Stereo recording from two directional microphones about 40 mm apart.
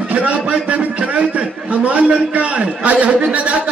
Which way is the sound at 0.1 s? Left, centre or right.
Right.